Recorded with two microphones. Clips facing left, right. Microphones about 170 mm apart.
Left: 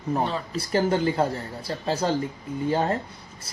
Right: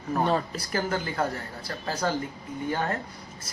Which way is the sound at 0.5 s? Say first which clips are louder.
Left 6 dB; 30° left (ahead or behind).